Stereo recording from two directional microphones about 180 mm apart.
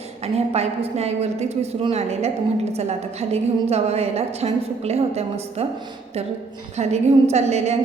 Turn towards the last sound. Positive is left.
turn(degrees=-35)  # may be behind; listen again after turning